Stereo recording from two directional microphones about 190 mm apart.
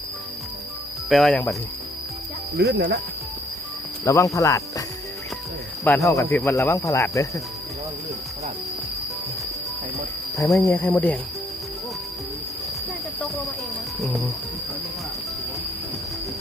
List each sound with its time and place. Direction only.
1.1 s speech: centre (ahead or behind)
2.6 s speech: 60° right (ahead or behind)
4.0 s speech: 15° left (ahead or behind)
5.8 s speech: 10° left (ahead or behind)
10.5 s speech: 10° left (ahead or behind)
13.2 s a sound: centre (ahead or behind)
14.0 s speech: centre (ahead or behind)